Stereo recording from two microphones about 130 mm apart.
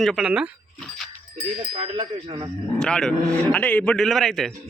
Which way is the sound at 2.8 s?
5° left (ahead or behind).